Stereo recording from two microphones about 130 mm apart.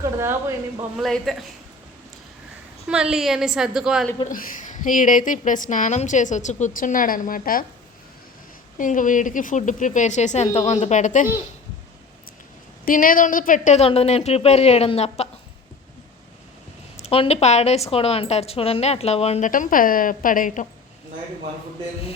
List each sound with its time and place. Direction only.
0.0 s speech: 20° right (ahead or behind)
0.9 s a woman's voice: centre (ahead or behind)
2.9 s a woman's voice: 5° right (ahead or behind)
4.3 s a woman's voice: 85° left
8.8 s a woman's voice: 90° left; by 11.3 s 75° left (ahead or behind)
12.8 s a woman's voice: 90° left
13.8 s speech: 50° left (ahead or behind)
17.0 s speech: 50° left (ahead or behind)
19.5 s a woman's voice: 90° left